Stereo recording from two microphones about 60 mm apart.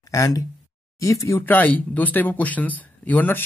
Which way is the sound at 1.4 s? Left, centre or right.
Left.